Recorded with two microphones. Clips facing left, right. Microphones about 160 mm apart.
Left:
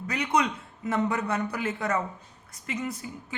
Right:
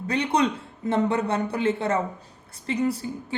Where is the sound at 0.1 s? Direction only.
30° right (ahead or behind).